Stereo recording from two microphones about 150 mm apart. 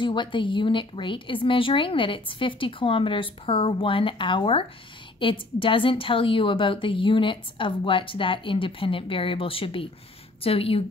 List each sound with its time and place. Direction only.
0.0 s a woman's voice: 30° left (ahead or behind)